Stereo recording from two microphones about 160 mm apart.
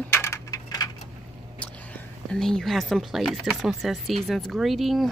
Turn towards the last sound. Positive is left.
turn(degrees=0)  # may be behind; listen again after turning